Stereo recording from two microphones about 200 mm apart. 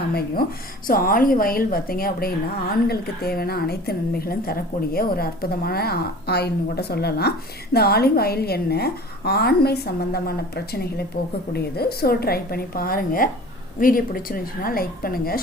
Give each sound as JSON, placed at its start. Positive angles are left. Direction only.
{"t": 0.1, "sound": "a woman's voice", "side_deg": 50}